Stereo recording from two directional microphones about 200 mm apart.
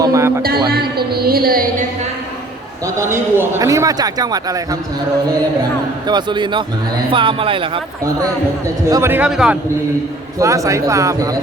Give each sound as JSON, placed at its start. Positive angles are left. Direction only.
{"t": 0.0, "sound": "music", "side_deg": -15}
{"t": 0.7, "sound": "speech", "side_deg": -50}
{"t": 2.8, "sound": "a man's voice", "side_deg": -15}
{"t": 6.1, "sound": "a man's voice", "side_deg": -20}
{"t": 10.4, "sound": "a man's voice", "side_deg": -15}